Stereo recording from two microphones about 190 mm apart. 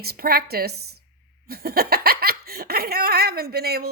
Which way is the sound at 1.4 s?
55° right (ahead or behind).